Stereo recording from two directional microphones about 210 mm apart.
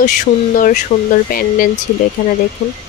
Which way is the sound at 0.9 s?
30° left (ahead or behind).